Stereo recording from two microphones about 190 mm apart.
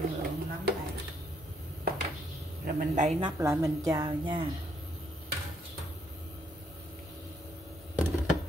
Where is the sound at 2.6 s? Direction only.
45° right (ahead or behind).